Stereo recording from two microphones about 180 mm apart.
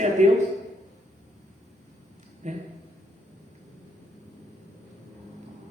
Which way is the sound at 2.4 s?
40° right (ahead or behind).